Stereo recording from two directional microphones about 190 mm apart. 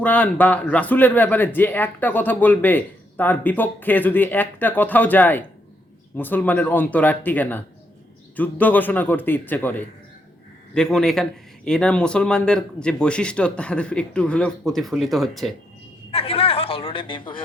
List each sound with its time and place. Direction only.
0.0 s a man's voice: 10° left (ahead or behind)
16.1 s a woman's voice: 30° left (ahead or behind)